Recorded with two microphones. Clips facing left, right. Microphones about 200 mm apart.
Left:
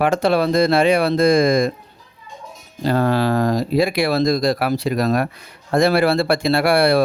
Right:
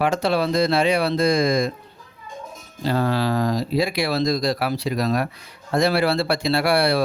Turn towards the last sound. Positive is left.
turn(degrees=55)  # may be behind; listen again after turning